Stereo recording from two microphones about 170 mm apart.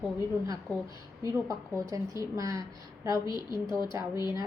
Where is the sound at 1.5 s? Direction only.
20° right (ahead or behind).